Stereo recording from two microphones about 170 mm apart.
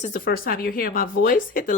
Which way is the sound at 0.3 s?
60° left (ahead or behind).